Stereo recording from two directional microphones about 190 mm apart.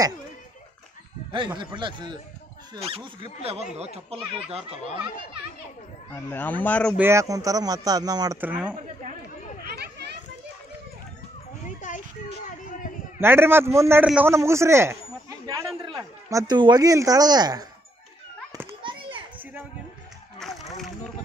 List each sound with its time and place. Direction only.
1.3 s speech: 25° right (ahead or behind)
6.1 s speech: 10° left (ahead or behind)
7.0 s speech: 15° right (ahead or behind)
8.4 s a man's voice: 5° right (ahead or behind)
9.7 s children playing: 60° right (ahead or behind)
11.6 s a sound: 40° left (ahead or behind)
13.2 s a man's voice: 10° right (ahead or behind)
18.8 s children playing: 25° right (ahead or behind)
20.3 s a sound: centre (ahead or behind)